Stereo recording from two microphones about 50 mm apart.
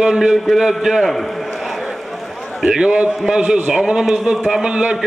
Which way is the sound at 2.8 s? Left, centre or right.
Right.